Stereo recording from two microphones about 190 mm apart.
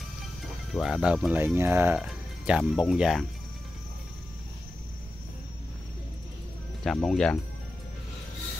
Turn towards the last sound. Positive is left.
turn(degrees=5)  # may be behind; listen again after turning